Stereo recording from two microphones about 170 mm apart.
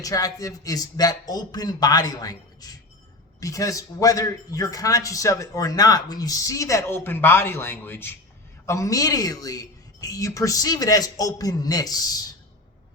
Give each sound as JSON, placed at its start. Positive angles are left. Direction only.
{"t": 0.0, "sound": "a man's voice", "side_deg": 20}